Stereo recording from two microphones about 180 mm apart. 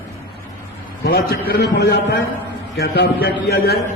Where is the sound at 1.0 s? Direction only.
60° left (ahead or behind).